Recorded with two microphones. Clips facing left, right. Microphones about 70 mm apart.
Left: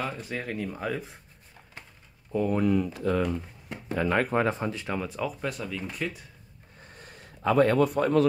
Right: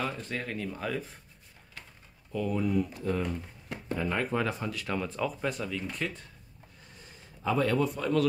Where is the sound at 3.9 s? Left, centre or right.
Left.